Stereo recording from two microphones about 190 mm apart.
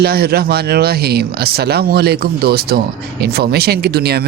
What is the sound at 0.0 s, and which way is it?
Speech, 55° right (ahead or behind).